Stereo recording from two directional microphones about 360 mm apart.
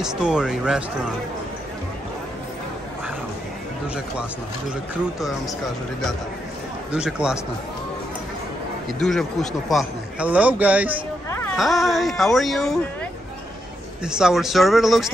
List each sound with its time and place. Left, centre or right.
0.0 s a man's voice: centre
6.9 s a man's voice: centre
9.0 s a man's voice: centre
14.0 s a man's voice: centre